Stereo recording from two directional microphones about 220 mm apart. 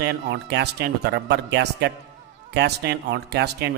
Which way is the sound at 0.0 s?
50° right (ahead or behind).